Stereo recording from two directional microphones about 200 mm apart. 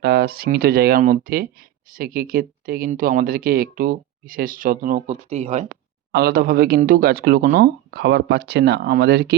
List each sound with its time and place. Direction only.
0.0 s speech: 50° right (ahead or behind); by 5.6 s 35° right (ahead or behind)
5.6 s speech: 55° right (ahead or behind)